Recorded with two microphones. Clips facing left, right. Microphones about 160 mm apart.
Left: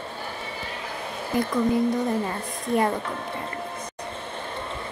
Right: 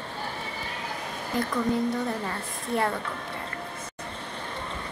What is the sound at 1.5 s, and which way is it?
A woman's voice, 15° left (ahead or behind).